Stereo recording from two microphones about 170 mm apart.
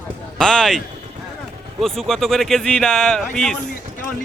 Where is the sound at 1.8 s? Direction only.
Centre (ahead or behind).